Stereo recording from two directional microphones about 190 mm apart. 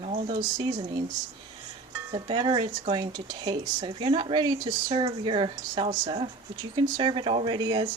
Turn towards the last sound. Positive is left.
turn(degrees=-20)  # may be behind; listen again after turning